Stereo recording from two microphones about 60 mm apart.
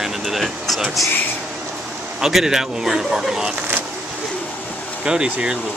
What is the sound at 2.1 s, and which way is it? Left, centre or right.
A man's voice, centre.